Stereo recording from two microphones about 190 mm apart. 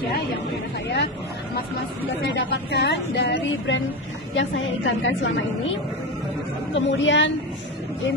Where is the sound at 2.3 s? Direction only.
65° left (ahead or behind).